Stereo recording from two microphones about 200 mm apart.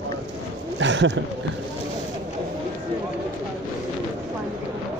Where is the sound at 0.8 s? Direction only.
65° right (ahead or behind).